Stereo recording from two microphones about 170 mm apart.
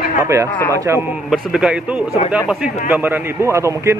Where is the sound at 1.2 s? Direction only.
Centre (ahead or behind).